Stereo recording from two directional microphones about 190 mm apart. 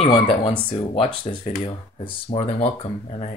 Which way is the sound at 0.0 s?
30° left (ahead or behind).